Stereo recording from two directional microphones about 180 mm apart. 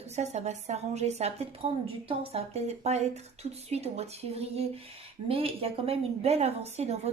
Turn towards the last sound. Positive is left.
turn(degrees=-35)  # may be behind; listen again after turning